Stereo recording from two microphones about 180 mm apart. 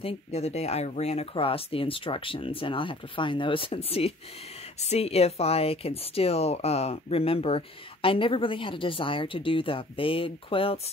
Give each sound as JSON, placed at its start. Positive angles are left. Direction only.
{"t": 0.0, "sound": "speech", "side_deg": 35}